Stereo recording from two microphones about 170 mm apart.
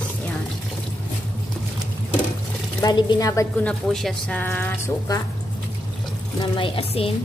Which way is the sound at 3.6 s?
5° left (ahead or behind).